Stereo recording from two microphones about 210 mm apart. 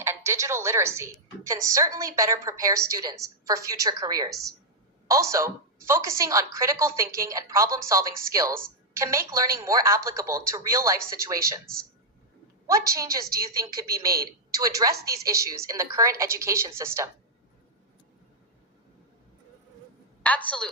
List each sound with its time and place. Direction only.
0.0 s a woman's voice: 10° right (ahead or behind)
13.4 s a woman's voice: 15° right (ahead or behind)
20.2 s a woman's voice: 5° left (ahead or behind)